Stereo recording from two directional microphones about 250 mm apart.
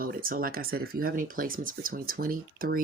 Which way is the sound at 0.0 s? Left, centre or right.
Right.